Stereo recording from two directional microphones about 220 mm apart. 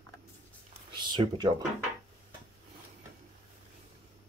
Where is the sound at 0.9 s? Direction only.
20° right (ahead or behind).